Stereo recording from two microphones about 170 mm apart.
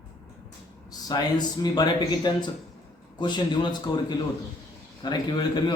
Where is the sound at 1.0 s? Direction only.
25° left (ahead or behind).